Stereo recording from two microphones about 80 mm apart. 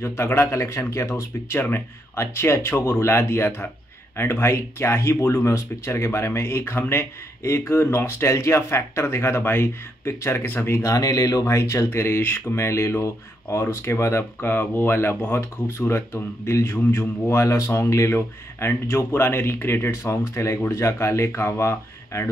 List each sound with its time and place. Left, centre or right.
0.0 s speech: left
10.9 s speech: left
11.5 s speech: left
12.2 s speech: left